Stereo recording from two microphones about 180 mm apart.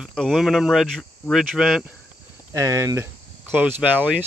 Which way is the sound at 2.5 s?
20° right (ahead or behind).